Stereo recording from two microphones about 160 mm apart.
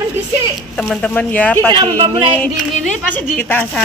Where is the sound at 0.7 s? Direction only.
5° left (ahead or behind).